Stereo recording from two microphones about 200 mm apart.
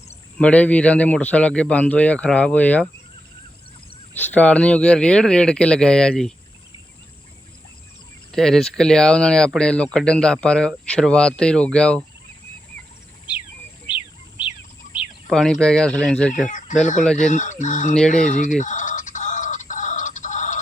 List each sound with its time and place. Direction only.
0.3 s speech: 5° left (ahead or behind)
4.2 s speech: 5° left (ahead or behind)
8.3 s speech: centre (ahead or behind)
15.3 s speech: centre (ahead or behind)
16.5 s speech: 40° left (ahead or behind)
18.1 s chicken: 40° left (ahead or behind)